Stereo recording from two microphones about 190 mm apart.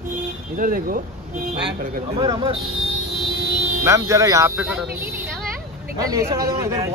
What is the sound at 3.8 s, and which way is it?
Speech, 15° right (ahead or behind).